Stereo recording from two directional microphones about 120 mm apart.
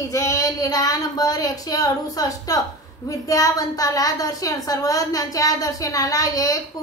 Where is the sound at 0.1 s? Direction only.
30° left (ahead or behind).